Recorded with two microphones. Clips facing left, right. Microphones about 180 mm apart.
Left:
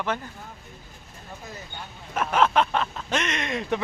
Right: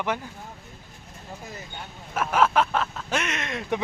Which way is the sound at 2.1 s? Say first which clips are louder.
Even; 5° right (ahead or behind).